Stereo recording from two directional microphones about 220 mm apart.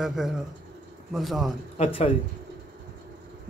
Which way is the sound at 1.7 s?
30° left (ahead or behind).